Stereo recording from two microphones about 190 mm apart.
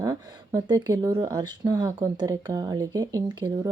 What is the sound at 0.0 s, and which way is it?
Speech, 20° right (ahead or behind).